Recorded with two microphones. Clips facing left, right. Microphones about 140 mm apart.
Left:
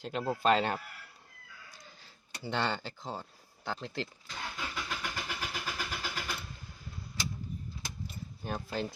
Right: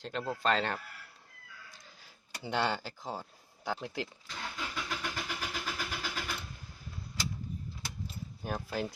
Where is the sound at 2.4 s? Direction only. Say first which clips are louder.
Right 1 dB; 10° right (ahead or behind).